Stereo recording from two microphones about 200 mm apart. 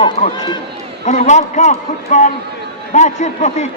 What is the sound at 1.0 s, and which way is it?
A man's voice, 35° left (ahead or behind).